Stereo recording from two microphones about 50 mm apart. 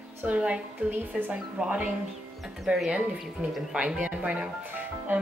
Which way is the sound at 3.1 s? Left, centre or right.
Right.